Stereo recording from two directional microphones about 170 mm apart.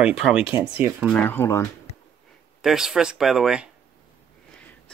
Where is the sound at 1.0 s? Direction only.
10° left (ahead or behind).